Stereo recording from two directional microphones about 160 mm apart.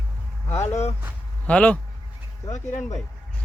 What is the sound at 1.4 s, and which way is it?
Speech, 10° left (ahead or behind).